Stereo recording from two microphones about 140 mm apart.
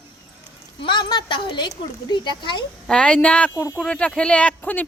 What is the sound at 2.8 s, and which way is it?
Speech, 5° left (ahead or behind).